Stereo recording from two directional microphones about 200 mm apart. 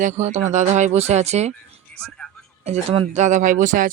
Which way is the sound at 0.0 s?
35° right (ahead or behind).